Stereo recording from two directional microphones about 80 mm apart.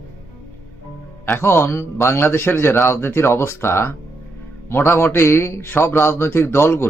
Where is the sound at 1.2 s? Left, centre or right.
Left.